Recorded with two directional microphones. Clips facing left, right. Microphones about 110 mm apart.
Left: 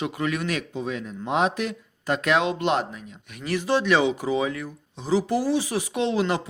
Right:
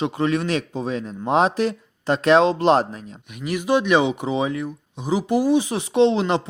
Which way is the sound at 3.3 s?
15° right (ahead or behind).